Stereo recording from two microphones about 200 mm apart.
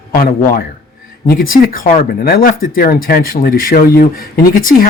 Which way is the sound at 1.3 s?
45° left (ahead or behind).